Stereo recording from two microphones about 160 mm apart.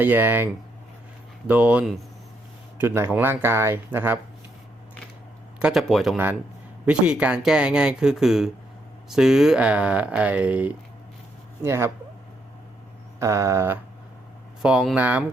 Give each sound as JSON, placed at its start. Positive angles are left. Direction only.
{"t": 0.0, "sound": "speech", "side_deg": -10}
{"t": 5.5, "sound": "speech", "side_deg": -5}
{"t": 13.1, "sound": "speech", "side_deg": -20}
{"t": 14.6, "sound": "speech", "side_deg": -5}